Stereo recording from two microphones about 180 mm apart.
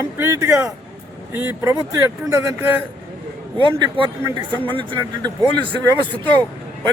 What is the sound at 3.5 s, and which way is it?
Speech, 25° right (ahead or behind).